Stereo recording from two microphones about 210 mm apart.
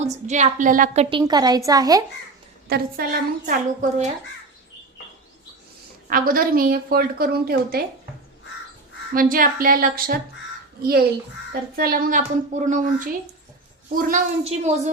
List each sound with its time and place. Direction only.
0.0 s a woman's voice: 35° right (ahead or behind)
1.1 s a woman's voice: 20° right (ahead or behind)
2.6 s a woman's voice: 45° right (ahead or behind)
6.1 s a woman's voice: 45° right (ahead or behind)
9.1 s a woman's voice: 40° right (ahead or behind)
11.8 s a woman's voice: 45° right (ahead or behind)
14.4 s a woman's voice: 30° right (ahead or behind)